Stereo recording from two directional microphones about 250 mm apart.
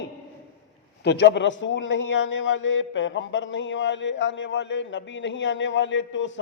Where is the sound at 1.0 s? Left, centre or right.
Left.